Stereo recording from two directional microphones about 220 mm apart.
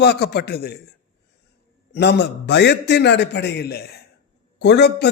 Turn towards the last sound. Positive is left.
turn(degrees=50)  # may be behind; listen again after turning